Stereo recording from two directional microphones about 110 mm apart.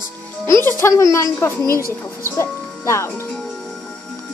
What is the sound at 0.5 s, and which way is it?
Speech, 20° left (ahead or behind).